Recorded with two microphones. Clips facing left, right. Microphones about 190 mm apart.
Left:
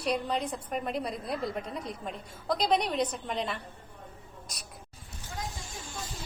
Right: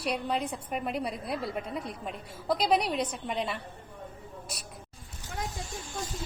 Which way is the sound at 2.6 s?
5° right (ahead or behind).